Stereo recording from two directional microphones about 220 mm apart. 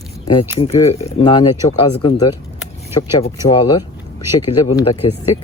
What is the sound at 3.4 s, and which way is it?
Speech, 25° left (ahead or behind).